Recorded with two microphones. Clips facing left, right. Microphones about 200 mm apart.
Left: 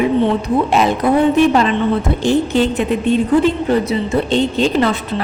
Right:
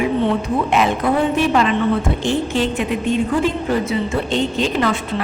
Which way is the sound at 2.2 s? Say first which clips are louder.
Left 5 dB; 35° left (ahead or behind).